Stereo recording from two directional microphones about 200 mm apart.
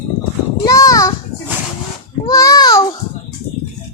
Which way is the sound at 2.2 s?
15° left (ahead or behind).